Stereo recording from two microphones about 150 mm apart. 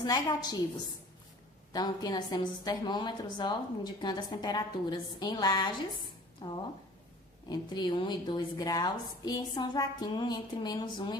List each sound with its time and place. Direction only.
0.1 s a woman's voice: 25° left (ahead or behind)
1.7 s a woman's voice: 25° left (ahead or behind)